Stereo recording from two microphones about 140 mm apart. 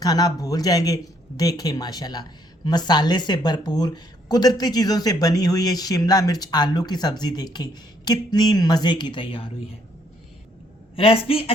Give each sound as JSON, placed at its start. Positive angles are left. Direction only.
{"t": 0.0, "sound": "a woman's voice", "side_deg": 25}
{"t": 10.9, "sound": "a woman's voice", "side_deg": 45}